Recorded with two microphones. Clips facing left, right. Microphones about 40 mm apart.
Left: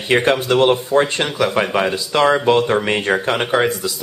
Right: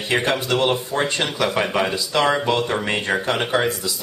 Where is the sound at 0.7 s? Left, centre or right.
Centre.